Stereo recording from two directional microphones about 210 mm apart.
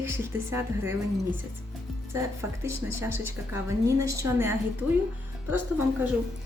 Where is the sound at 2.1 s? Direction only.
15° right (ahead or behind).